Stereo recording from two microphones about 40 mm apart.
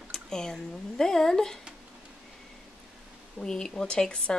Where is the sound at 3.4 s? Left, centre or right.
Centre.